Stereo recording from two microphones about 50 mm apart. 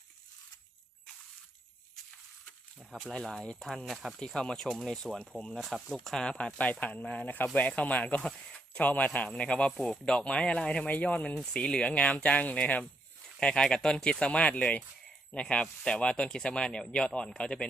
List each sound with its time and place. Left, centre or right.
2.9 s speech: centre
3.8 s speech: centre
4.4 s speech: centre
6.3 s speech: left
8.4 s a sound: centre
8.8 s speech: left
10.8 s speech: left